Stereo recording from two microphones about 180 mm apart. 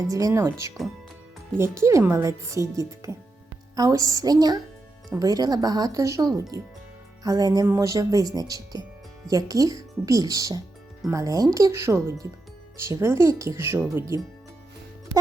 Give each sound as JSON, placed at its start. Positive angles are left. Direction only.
{"t": 0.1, "sound": "speech", "side_deg": -20}
{"t": 1.5, "sound": "speech", "side_deg": -15}
{"t": 7.3, "sound": "speech", "side_deg": -20}